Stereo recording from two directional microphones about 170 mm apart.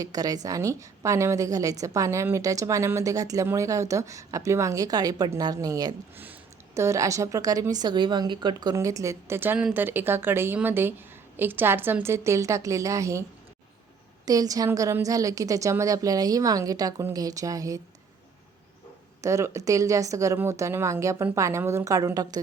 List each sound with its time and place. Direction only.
0.0 s a woman's voice: 20° right (ahead or behind)
14.3 s speech: 20° right (ahead or behind)
19.2 s a woman's voice: 15° right (ahead or behind)